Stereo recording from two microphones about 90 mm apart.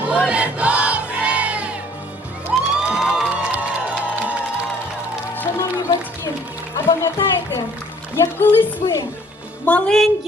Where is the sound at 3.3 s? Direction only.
15° right (ahead or behind).